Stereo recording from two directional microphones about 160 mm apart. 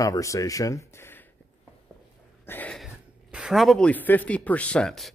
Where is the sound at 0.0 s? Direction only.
20° left (ahead or behind).